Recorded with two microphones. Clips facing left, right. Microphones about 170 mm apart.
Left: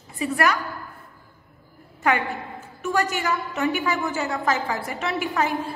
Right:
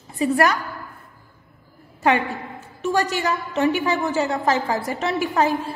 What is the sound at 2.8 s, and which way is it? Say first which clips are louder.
A woman's voice: right 3 dB; 30° right (ahead or behind).